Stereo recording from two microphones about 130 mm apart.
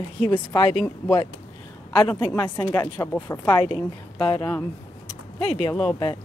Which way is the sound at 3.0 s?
25° left (ahead or behind).